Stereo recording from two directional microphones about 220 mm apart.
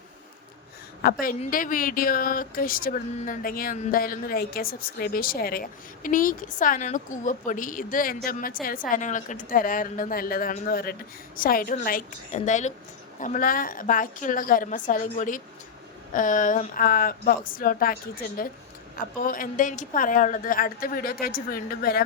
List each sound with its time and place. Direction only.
1.2 s speech: 40° left (ahead or behind)